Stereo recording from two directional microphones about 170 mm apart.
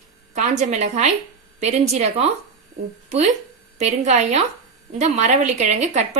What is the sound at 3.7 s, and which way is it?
A woman's voice, 45° right (ahead or behind).